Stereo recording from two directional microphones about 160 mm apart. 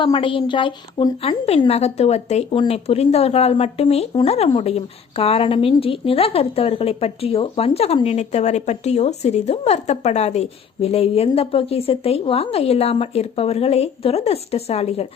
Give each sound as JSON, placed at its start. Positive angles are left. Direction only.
{"t": 0.0, "sound": "speech", "side_deg": 30}